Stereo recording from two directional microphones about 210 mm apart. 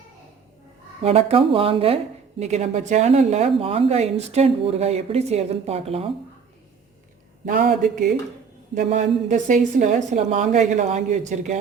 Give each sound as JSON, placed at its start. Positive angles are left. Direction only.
{"t": 1.0, "sound": "speech", "side_deg": -30}
{"t": 7.4, "sound": "speech", "side_deg": -40}